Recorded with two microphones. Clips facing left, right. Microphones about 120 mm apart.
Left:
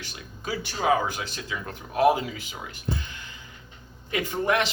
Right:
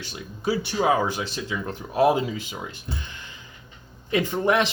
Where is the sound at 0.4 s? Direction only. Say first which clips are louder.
Right 3 dB; 25° right (ahead or behind).